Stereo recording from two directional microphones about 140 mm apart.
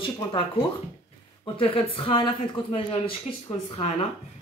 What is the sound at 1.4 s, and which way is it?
Speech, 40° left (ahead or behind).